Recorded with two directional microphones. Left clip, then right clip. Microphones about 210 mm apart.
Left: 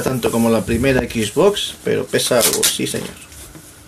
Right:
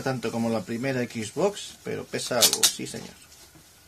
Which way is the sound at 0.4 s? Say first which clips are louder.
Left 12 dB; 35° right (ahead or behind).